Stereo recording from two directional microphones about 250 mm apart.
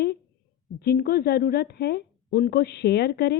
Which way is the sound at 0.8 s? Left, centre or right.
Left.